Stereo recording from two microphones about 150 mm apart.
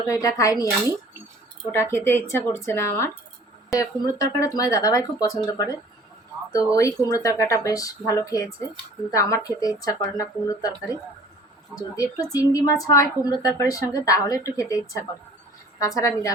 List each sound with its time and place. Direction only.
0.1 s a woman's voice: 20° left (ahead or behind)
11.7 s a woman's voice: 25° left (ahead or behind)